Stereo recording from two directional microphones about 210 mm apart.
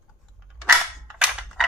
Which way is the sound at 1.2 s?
5° right (ahead or behind).